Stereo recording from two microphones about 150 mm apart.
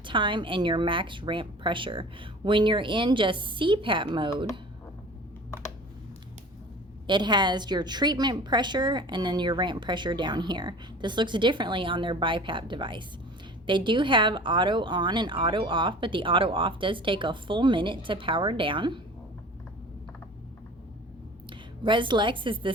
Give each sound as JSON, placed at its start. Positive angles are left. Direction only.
{"t": 0.0, "sound": "a woman's voice", "side_deg": -35}
{"t": 7.1, "sound": "a woman's voice", "side_deg": -30}
{"t": 21.8, "sound": "a woman's voice", "side_deg": -30}